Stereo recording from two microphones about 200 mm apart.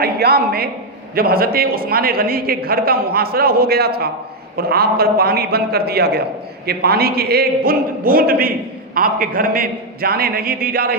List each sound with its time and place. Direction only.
0.0 s a woman's voice: 50° right (ahead or behind)